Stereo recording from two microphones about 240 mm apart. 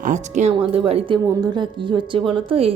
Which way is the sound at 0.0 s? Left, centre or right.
Right.